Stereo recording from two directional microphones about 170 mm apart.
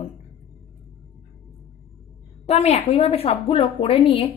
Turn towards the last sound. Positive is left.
turn(degrees=35)  # may be behind; listen again after turning